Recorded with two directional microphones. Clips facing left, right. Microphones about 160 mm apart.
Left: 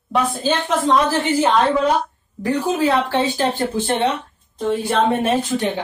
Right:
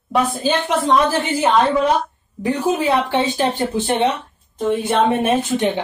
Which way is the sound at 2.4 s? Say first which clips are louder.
Even; 15° right (ahead or behind).